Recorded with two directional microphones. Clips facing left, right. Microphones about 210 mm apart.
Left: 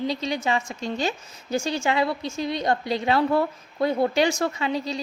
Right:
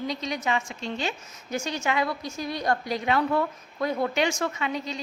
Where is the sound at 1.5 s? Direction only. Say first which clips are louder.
Left 4 dB; 30° left (ahead or behind).